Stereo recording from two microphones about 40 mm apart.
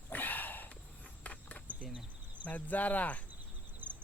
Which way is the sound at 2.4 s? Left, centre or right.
Left.